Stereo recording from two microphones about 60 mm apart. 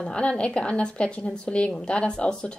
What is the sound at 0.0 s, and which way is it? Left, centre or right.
Speech, centre.